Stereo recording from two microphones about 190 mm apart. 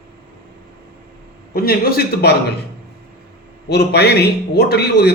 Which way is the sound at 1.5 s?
55° left (ahead or behind).